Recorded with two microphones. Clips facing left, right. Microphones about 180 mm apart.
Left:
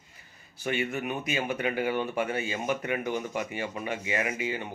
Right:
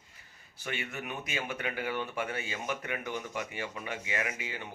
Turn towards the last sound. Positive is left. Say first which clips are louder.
# left 6 dB
turn(degrees=15)  # may be behind; listen again after turning